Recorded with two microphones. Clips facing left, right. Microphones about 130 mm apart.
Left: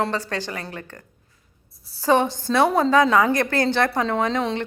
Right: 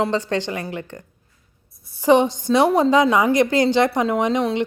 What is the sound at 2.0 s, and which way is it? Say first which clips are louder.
A woman's voice: right 4 dB; 15° right (ahead or behind).